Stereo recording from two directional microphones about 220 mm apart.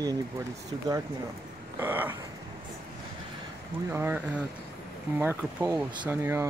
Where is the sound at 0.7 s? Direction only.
20° right (ahead or behind).